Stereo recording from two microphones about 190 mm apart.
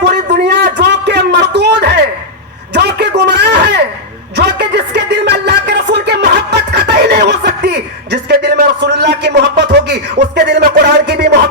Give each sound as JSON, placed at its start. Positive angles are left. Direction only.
{"t": 0.0, "sound": "a sound", "side_deg": -60}
{"t": 4.4, "sound": "music", "side_deg": -60}
{"t": 6.2, "sound": "snicker", "side_deg": -60}